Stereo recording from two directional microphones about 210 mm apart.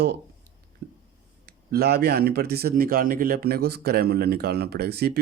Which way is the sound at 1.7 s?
45° right (ahead or behind).